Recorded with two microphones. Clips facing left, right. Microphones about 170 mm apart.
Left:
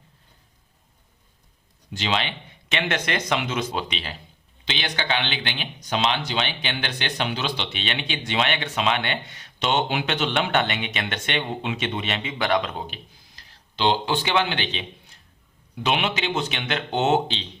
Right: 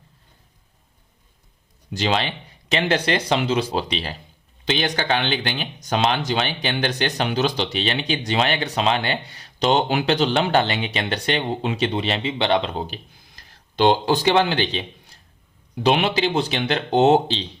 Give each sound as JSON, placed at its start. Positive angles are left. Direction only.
{"t": 1.9, "sound": "speech", "side_deg": -40}
{"t": 13.3, "sound": "a man's voice", "side_deg": -45}